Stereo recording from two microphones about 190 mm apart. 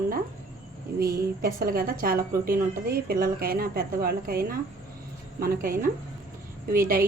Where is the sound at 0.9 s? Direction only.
50° right (ahead or behind).